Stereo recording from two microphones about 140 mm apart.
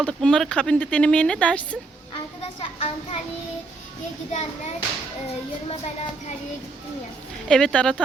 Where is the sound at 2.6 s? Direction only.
45° left (ahead or behind).